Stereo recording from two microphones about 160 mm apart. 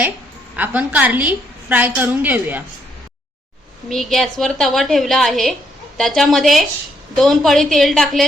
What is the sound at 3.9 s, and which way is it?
A woman's voice, centre (ahead or behind).